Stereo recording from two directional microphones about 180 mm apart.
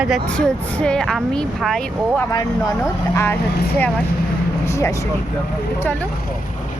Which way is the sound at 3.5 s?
60° left (ahead or behind).